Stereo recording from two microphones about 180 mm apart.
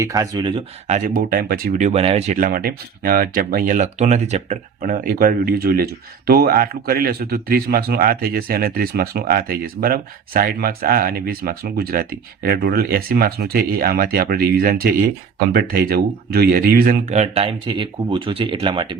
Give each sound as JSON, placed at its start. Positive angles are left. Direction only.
{"t": 0.0, "sound": "speech", "side_deg": -20}
{"t": 0.9, "sound": "speech", "side_deg": -45}
{"t": 1.9, "sound": "speech", "side_deg": -35}
{"t": 17.1, "sound": "speech", "side_deg": -35}